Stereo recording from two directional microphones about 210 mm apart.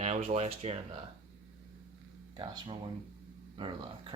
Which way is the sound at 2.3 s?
20° right (ahead or behind).